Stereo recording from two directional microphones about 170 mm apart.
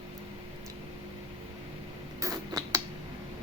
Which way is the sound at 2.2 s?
20° right (ahead or behind).